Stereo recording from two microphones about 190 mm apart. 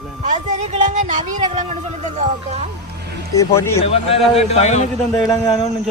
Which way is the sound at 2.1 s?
30° right (ahead or behind).